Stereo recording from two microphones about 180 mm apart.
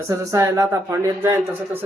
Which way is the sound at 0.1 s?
15° right (ahead or behind).